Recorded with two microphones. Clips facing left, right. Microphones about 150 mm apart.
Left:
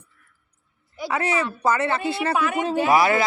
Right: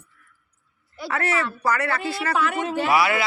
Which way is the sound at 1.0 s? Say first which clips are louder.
Left 1 dB; 15° left (ahead or behind).